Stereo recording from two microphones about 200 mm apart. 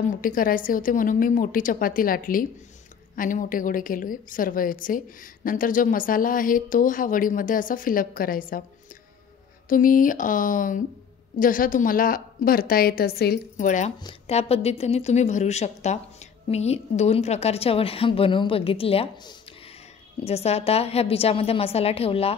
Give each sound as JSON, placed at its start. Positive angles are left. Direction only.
{"t": 0.2, "sound": "a woman's voice", "side_deg": 45}
{"t": 9.7, "sound": "a woman's voice", "side_deg": 45}
{"t": 13.9, "sound": "a woman's voice", "side_deg": 25}